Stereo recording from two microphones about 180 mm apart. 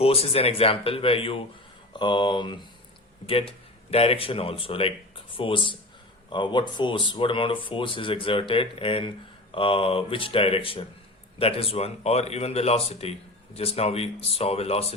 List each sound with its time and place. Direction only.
0.0 s speech: 35° left (ahead or behind)